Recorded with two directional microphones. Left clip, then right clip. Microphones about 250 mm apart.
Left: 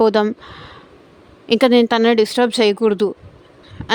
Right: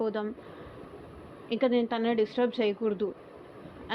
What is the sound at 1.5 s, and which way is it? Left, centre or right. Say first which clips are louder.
A woman's voice: left 14 dB; left.